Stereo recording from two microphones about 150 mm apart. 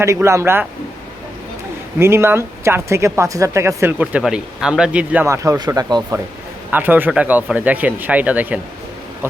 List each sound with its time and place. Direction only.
0.0 s speech: 20° right (ahead or behind)
2.0 s speech: 15° right (ahead or behind)
5.2 s speech: 20° right (ahead or behind)
6.7 s speech: 10° right (ahead or behind)